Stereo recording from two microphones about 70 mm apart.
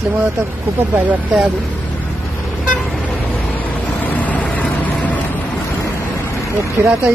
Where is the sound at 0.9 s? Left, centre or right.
Right.